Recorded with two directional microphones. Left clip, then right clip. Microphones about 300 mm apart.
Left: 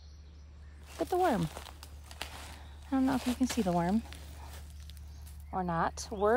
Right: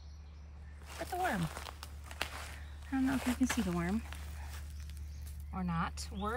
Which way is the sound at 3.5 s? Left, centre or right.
Centre.